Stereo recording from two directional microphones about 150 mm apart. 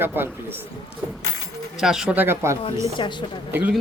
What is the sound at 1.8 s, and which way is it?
Speech, 5° right (ahead or behind).